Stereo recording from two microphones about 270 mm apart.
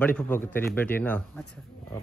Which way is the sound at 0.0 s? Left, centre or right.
Centre.